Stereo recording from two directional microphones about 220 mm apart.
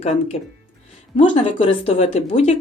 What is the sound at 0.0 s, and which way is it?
Speech, 30° left (ahead or behind).